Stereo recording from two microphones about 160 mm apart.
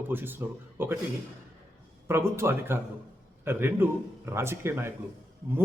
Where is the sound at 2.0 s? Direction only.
15° right (ahead or behind).